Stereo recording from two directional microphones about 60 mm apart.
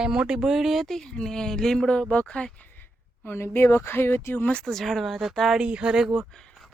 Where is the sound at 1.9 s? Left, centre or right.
Centre.